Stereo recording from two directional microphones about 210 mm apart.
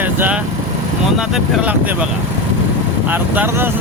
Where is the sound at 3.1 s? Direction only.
10° right (ahead or behind).